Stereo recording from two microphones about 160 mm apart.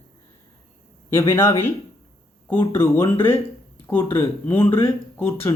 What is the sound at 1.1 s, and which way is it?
Speech, 15° left (ahead or behind).